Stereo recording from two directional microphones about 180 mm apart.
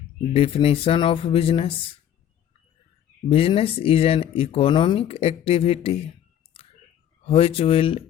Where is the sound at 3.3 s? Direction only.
30° left (ahead or behind).